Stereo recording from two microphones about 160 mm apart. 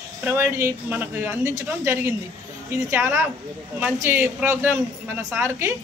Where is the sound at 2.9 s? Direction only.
15° right (ahead or behind).